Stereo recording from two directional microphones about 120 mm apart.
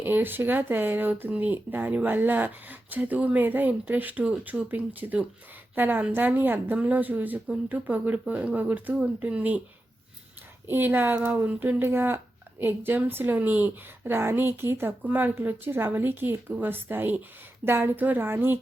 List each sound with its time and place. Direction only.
0.0 s speech: 15° right (ahead or behind)
10.7 s speech: 15° right (ahead or behind)